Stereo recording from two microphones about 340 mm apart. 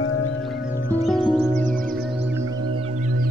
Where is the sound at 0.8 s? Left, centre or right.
Centre.